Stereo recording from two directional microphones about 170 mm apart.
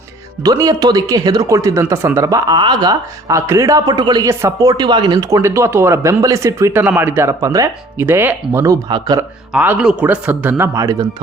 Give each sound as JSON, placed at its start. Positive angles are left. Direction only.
{"t": 0.4, "sound": "speech", "side_deg": -20}
{"t": 9.5, "sound": "a man's voice", "side_deg": -5}